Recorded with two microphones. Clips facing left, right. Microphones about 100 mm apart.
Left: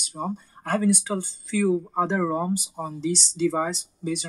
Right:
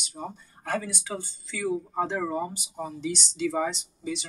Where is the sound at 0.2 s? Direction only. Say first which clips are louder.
Left 7 dB; 45° left (ahead or behind).